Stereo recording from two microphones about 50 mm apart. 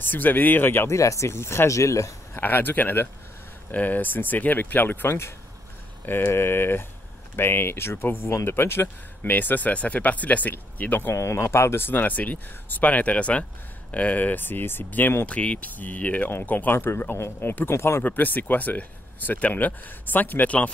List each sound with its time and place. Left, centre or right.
0.0 s speech: left
0.8 s speech: left
2.4 s speech: left
8.8 s speech: left
11.1 s speech: left
12.0 s speech: left
15.2 s speech: left
16.7 s speech: left
17.6 s speech: left
18.0 s speech: left